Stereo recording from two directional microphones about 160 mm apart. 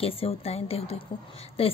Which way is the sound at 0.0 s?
35° left (ahead or behind).